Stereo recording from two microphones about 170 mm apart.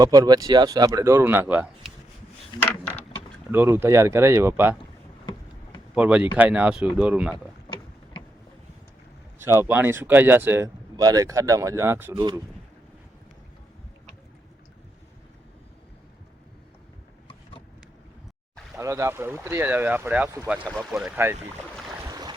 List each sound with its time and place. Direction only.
0.0 s speech: 25° right (ahead or behind); by 1.9 s 5° right (ahead or behind)
2.5 s mechanisms: 30° left (ahead or behind)
3.5 s speech: 10° right (ahead or behind)
5.9 s speech: 5° right (ahead or behind)
8.1 s vehicle: 25° left (ahead or behind)
9.4 s speech: 15° right (ahead or behind)
18.8 s speech: 15° right (ahead or behind)
20.7 s speech: centre (ahead or behind)
22.0 s a sound: 20° right (ahead or behind)